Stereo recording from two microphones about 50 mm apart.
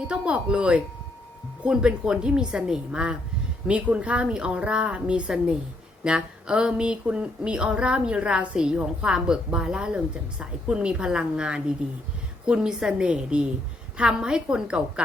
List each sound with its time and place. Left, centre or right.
0.1 s a woman's voice: right